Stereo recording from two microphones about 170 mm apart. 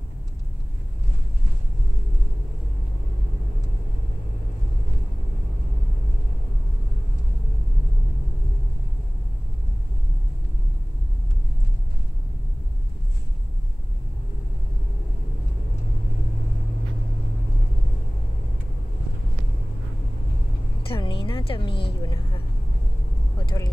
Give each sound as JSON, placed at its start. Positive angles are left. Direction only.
{"t": 20.9, "sound": "a sound", "side_deg": 30}
{"t": 22.0, "sound": "vehicle", "side_deg": 25}
{"t": 23.4, "sound": "vehicle", "side_deg": 25}